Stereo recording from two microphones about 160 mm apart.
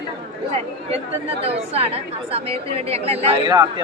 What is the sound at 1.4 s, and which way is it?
A woman's voice, 40° right (ahead or behind).